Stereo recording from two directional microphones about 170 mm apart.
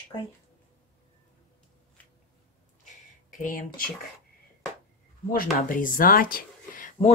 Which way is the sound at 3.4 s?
55° left (ahead or behind).